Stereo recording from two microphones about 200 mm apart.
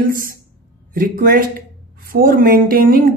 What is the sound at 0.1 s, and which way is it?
Speech, 45° right (ahead or behind).